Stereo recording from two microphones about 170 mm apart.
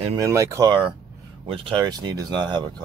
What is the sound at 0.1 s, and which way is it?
Speech, 20° right (ahead or behind).